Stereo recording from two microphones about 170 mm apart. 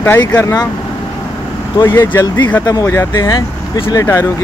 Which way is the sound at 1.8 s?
15° left (ahead or behind).